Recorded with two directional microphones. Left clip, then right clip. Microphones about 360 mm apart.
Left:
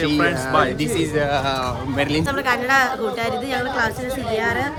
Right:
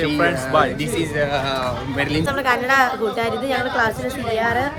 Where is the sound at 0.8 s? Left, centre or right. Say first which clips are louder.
Left 1 dB; centre.